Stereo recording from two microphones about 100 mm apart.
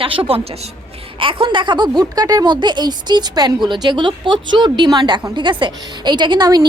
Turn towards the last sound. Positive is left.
turn(degrees=-45)  # may be behind; listen again after turning